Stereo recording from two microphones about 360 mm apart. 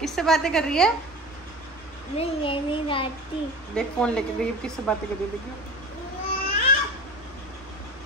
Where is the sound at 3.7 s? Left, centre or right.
Centre.